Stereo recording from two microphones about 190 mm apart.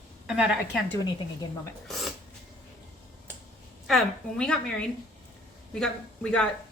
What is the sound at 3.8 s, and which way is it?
A woman's voice, 5° left (ahead or behind).